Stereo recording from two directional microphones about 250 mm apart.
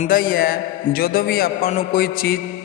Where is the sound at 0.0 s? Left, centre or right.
Left.